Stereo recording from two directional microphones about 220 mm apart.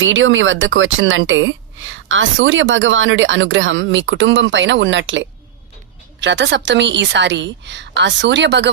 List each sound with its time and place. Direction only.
0.0 s a woman's voice: 60° right (ahead or behind)